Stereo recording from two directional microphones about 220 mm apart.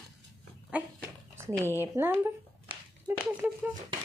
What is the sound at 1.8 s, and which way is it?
Speech, 10° right (ahead or behind).